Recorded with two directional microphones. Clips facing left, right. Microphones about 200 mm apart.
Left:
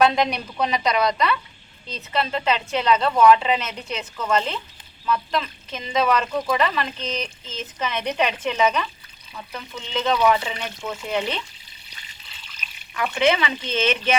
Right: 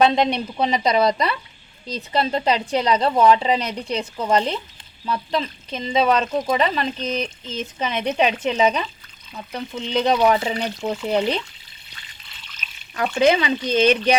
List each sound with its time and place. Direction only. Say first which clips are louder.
0.0 s a woman's voice: right 2 dB; 25° right (ahead or behind)
13.0 s speech: right 3 dB; 35° right (ahead or behind)